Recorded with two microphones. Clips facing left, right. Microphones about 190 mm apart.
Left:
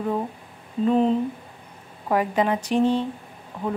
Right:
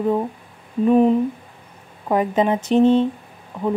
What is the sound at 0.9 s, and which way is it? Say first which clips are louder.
Speech: right 5 dB; 15° right (ahead or behind).